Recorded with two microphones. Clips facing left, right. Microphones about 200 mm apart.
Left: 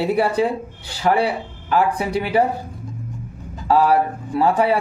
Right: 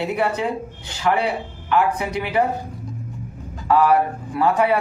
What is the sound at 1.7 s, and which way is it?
Speech, 30° left (ahead or behind).